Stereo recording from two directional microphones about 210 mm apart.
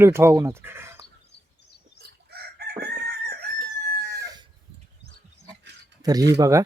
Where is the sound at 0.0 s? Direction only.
10° right (ahead or behind).